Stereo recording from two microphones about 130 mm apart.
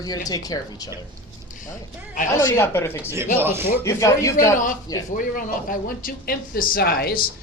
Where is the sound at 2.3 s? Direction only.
25° left (ahead or behind).